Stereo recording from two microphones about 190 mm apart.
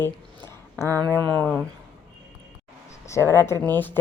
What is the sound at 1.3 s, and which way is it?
Speech, 5° left (ahead or behind).